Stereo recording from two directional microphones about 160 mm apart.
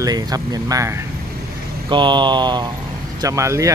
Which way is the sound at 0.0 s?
25° right (ahead or behind).